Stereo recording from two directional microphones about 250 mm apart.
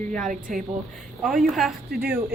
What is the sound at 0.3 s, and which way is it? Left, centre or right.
Speech, right.